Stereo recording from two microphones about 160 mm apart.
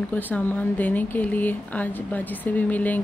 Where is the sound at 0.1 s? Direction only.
10° left (ahead or behind).